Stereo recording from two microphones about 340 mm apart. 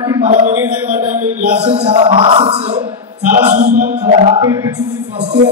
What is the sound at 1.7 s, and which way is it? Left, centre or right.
Speech, centre.